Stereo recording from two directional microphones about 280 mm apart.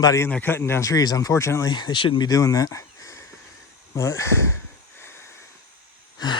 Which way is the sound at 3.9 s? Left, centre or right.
Centre.